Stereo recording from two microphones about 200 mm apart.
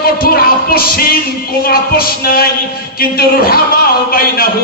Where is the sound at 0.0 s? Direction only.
50° left (ahead or behind).